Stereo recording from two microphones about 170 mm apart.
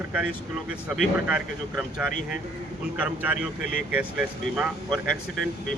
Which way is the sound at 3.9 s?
5° right (ahead or behind).